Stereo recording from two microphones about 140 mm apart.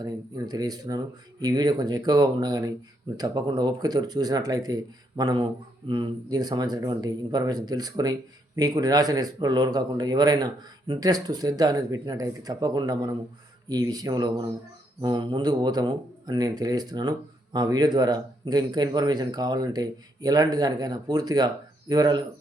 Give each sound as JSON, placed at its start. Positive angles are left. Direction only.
{"t": 0.0, "sound": "speech", "side_deg": -25}